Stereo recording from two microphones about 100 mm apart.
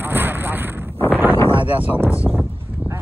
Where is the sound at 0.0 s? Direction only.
20° right (ahead or behind).